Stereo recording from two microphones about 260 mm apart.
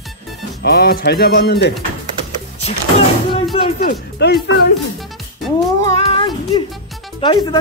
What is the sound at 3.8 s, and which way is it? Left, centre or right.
Speech, left.